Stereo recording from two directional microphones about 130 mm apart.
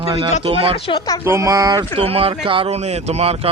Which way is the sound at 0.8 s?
40° left (ahead or behind).